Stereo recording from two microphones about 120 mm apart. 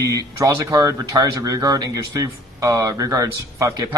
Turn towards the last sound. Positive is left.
turn(degrees=-30)  # may be behind; listen again after turning